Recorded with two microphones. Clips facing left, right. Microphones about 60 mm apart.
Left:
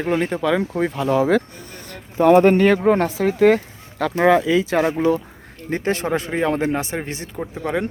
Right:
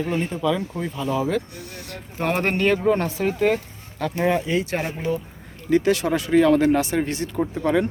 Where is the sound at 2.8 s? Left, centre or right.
Left.